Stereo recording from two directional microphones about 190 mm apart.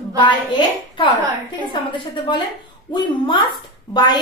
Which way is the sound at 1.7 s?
25° left (ahead or behind).